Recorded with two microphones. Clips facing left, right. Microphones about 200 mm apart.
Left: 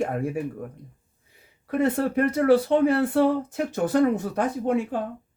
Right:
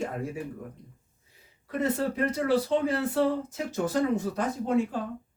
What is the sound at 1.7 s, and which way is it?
Speech, 60° left (ahead or behind).